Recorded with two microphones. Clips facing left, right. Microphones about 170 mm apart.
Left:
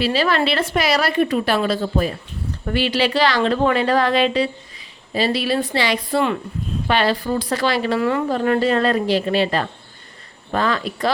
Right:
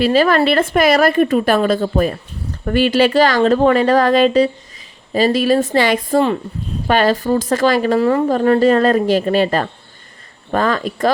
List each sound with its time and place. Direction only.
0.0 s a woman's voice: 50° right (ahead or behind)